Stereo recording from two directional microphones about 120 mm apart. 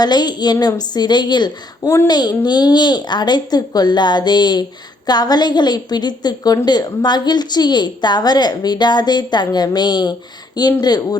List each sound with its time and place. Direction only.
0.0 s a woman's voice: 35° left (ahead or behind)